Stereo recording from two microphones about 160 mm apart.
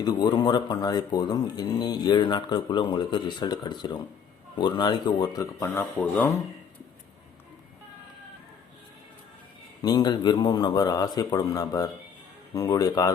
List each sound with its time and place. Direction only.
0.0 s speech: 25° left (ahead or behind)
9.8 s speech: 25° left (ahead or behind)